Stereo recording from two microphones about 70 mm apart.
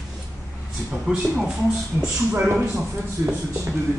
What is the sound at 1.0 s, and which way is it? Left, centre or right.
Speech, centre.